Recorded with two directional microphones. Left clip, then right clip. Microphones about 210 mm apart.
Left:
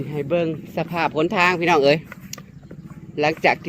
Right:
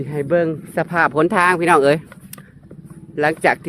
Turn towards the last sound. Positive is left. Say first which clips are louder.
# right 2 dB
turn(degrees=-15)  # may be behind; listen again after turning